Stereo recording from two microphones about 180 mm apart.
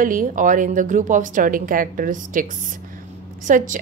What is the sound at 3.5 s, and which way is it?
Speech, 45° right (ahead or behind).